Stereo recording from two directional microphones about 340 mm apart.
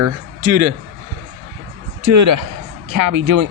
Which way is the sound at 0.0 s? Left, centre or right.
Right.